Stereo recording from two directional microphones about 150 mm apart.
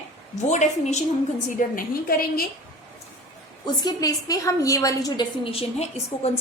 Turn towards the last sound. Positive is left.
turn(degrees=45)  # may be behind; listen again after turning